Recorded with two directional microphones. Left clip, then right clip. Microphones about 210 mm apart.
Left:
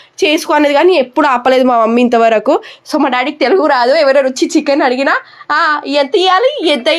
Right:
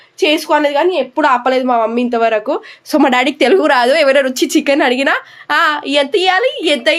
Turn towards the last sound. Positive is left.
turn(degrees=10)  # may be behind; listen again after turning